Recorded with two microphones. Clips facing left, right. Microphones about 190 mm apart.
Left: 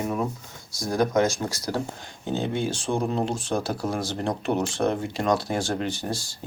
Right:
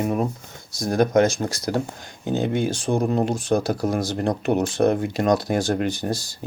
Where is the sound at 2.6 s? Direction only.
40° right (ahead or behind).